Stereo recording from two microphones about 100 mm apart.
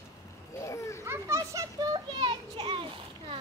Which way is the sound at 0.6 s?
30° left (ahead or behind).